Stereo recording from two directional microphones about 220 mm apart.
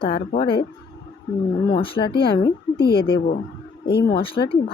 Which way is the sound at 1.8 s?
25° left (ahead or behind).